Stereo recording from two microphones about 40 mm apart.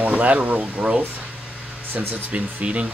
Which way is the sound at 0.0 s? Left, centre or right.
Right.